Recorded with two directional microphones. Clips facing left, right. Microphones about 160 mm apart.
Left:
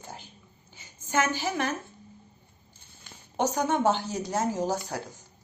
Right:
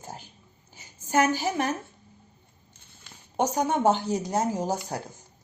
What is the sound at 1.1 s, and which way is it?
Speech, 40° right (ahead or behind).